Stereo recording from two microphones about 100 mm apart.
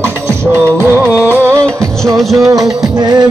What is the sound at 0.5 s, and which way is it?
Music, 25° right (ahead or behind).